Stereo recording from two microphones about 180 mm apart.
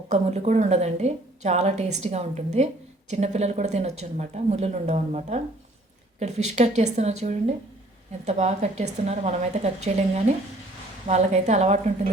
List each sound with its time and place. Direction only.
0.1 s a woman's voice: 40° right (ahead or behind)